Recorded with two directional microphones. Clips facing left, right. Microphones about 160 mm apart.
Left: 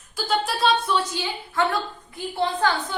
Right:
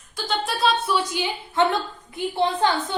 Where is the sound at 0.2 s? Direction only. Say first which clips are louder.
Left 1 dB; centre (ahead or behind).